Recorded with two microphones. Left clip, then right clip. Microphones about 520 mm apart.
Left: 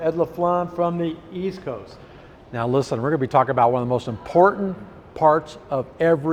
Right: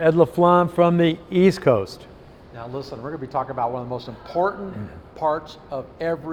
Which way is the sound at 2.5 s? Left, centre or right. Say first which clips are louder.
Left 11 dB; left.